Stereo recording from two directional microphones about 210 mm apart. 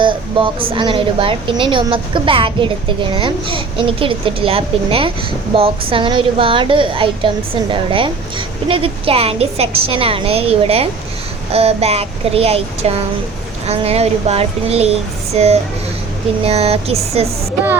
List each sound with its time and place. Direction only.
0.0 s a woman's voice: 25° right (ahead or behind)